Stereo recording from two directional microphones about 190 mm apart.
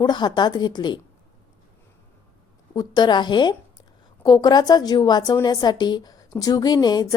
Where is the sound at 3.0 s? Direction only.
25° left (ahead or behind).